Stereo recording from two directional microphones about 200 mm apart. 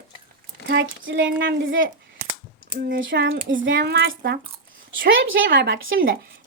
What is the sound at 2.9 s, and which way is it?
Speech, 50° right (ahead or behind).